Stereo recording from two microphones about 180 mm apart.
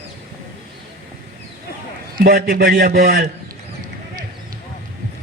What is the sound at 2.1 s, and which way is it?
A man's voice, 60° right (ahead or behind).